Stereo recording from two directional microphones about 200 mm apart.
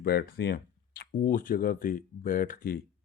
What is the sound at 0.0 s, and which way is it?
Speech, 50° left (ahead or behind).